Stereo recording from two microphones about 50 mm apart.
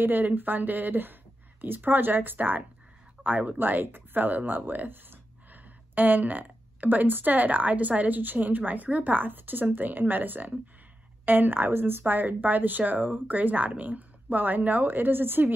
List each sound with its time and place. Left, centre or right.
0.0 s speech: right